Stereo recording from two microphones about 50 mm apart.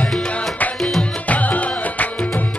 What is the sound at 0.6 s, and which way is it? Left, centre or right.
Music, left.